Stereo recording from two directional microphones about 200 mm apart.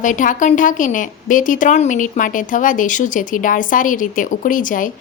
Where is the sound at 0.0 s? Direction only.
40° left (ahead or behind).